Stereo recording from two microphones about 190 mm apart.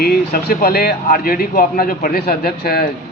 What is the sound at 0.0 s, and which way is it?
Speech, 55° left (ahead or behind).